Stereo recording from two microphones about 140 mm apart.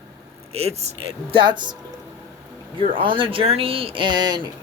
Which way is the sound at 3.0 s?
35° right (ahead or behind).